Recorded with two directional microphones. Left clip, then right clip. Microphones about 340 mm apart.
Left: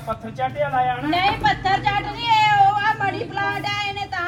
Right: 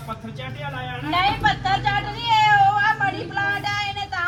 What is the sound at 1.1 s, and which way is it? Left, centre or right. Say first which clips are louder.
Speech: right 3 dB; centre.